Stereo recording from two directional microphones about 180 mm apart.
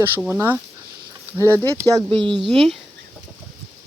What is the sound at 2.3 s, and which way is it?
Speech, centre (ahead or behind).